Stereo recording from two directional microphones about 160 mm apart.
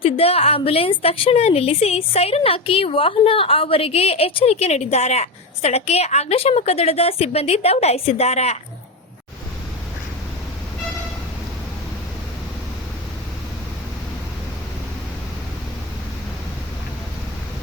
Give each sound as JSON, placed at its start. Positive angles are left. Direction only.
{"t": 0.0, "sound": "a woman's voice", "side_deg": 35}